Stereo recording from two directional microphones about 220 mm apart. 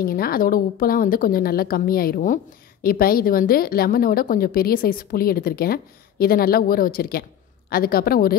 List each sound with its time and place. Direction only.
0.0 s a woman's voice: 40° left (ahead or behind)